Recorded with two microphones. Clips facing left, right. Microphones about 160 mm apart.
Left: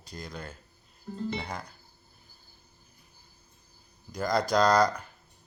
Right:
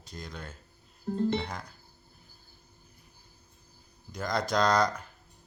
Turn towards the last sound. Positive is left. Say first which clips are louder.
# left 3 dB
turn(degrees=0)  # may be behind; listen again after turning